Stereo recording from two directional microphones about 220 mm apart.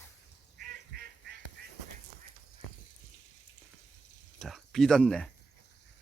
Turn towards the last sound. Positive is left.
turn(degrees=5)  # may be behind; listen again after turning